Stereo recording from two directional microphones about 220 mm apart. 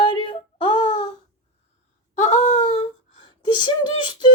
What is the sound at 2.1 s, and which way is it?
A woman's voice, 30° left (ahead or behind).